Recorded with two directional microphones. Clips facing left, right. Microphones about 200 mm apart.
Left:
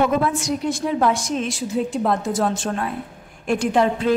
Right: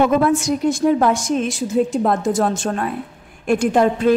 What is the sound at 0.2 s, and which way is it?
A woman's voice, 45° right (ahead or behind).